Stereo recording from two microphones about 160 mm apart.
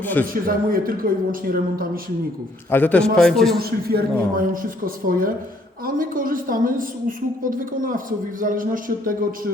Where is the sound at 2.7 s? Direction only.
10° left (ahead or behind).